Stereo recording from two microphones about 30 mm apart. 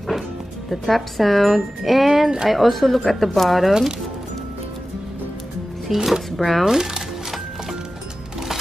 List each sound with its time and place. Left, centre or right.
0.7 s speech: centre
5.9 s speech: centre
6.6 s music: centre